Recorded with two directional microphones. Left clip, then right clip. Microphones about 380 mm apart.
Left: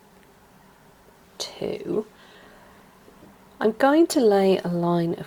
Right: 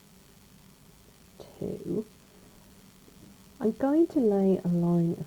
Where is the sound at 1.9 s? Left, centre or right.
Centre.